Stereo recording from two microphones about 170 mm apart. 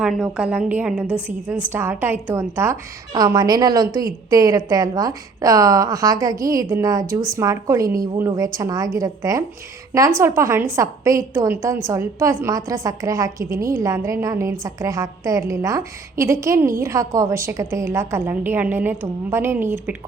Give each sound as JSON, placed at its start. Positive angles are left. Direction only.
{"t": 0.0, "sound": "a woman's voice", "side_deg": -5}